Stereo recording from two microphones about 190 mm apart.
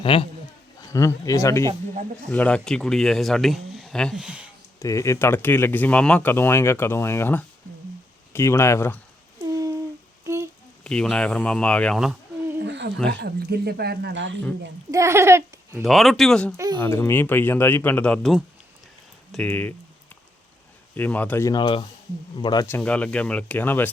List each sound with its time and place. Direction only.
0.0 s speech: 30° left (ahead or behind)
0.8 s speech: 15° left (ahead or behind); by 4.4 s 5° right (ahead or behind)
4.8 s speech: 15° left (ahead or behind)
9.5 s humming: 20° right (ahead or behind)
10.2 s a sound: 15° right (ahead or behind)
10.8 s speech: 5° left (ahead or behind)
12.6 s a sound: 65° right (ahead or behind)
13.1 s speech: 60° right (ahead or behind)
14.8 s speech: 15° right (ahead or behind)
15.8 s speech: centre (ahead or behind)
20.9 s speech: 10° left (ahead or behind)
22.6 s speech: 10° left (ahead or behind)